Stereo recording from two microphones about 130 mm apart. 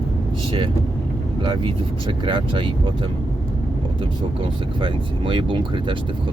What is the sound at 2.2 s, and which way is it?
Speech, 40° right (ahead or behind).